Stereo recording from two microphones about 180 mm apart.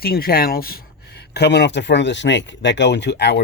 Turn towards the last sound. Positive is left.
turn(degrees=70)  # may be behind; listen again after turning